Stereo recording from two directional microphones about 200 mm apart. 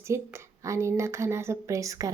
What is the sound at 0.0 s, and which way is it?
A woman's voice, 15° right (ahead or behind).